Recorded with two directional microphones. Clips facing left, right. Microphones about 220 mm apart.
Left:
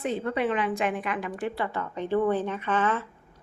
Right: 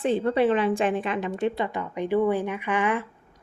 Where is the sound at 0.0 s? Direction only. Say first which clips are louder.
Right 5 dB; 30° right (ahead or behind); by 3.1 s 15° right (ahead or behind).